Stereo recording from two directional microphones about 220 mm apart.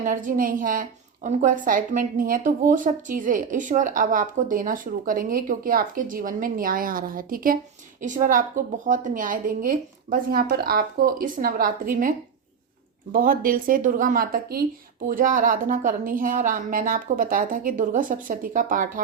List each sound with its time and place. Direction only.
0.0 s a woman's voice: 35° right (ahead or behind)
13.1 s a woman's voice: 40° right (ahead or behind)